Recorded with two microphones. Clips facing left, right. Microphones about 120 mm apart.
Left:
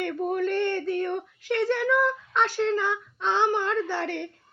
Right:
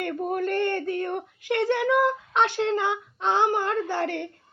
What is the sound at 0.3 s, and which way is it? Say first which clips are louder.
Speech: right 1 dB; 50° right (ahead or behind).